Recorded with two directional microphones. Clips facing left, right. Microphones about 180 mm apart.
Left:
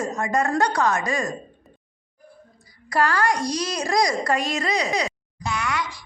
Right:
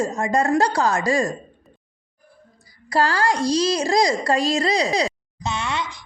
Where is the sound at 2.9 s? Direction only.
30° right (ahead or behind).